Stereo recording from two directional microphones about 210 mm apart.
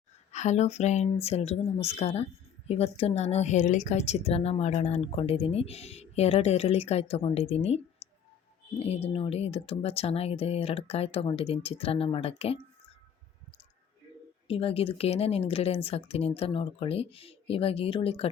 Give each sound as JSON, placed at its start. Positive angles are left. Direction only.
{"t": 0.3, "sound": "a woman's voice", "side_deg": 35}
{"t": 8.0, "sound": "clicking", "side_deg": 10}
{"t": 8.8, "sound": "a woman's voice", "side_deg": 30}
{"t": 14.4, "sound": "a woman's voice", "side_deg": 25}